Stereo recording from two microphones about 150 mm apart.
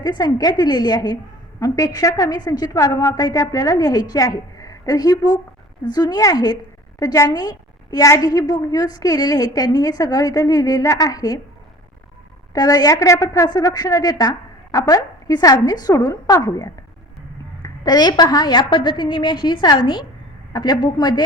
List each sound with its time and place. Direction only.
0.0 s a woman's voice: 25° left (ahead or behind)
12.5 s a woman's voice: 25° left (ahead or behind)